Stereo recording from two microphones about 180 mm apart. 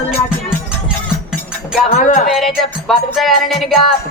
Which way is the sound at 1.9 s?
40° left (ahead or behind).